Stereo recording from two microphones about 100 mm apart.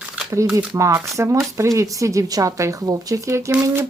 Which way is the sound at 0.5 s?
35° right (ahead or behind).